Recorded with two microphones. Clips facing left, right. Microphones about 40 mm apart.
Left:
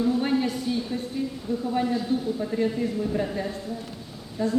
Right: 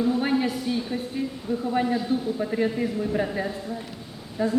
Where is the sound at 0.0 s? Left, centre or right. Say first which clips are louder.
Even; centre.